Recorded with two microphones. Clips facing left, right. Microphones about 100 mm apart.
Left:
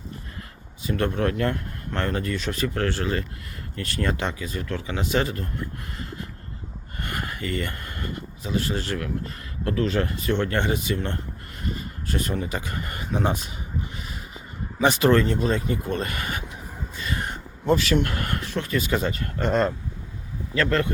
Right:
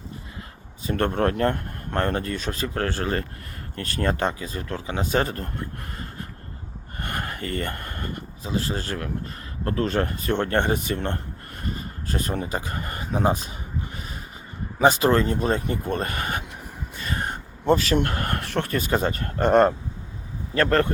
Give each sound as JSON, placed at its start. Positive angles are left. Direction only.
{"t": 0.9, "sound": "speech", "side_deg": -50}
{"t": 7.0, "sound": "speech", "side_deg": -50}
{"t": 11.6, "sound": "speech", "side_deg": -40}
{"t": 14.8, "sound": "speech", "side_deg": -30}
{"t": 17.0, "sound": "a sound", "side_deg": -45}
{"t": 18.3, "sound": "speech", "side_deg": -55}